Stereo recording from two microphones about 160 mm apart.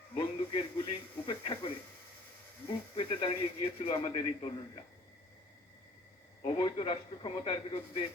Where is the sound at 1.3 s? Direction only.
30° left (ahead or behind).